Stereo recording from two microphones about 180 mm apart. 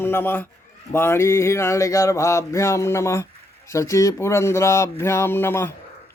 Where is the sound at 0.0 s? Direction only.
10° left (ahead or behind).